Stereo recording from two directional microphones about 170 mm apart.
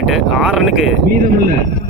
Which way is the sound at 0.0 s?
Centre (ahead or behind).